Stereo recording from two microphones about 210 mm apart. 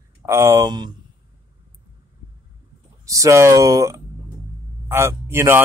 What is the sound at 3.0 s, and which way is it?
Speech, 15° right (ahead or behind).